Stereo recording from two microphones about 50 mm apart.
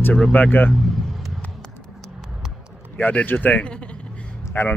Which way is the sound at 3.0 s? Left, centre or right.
Left.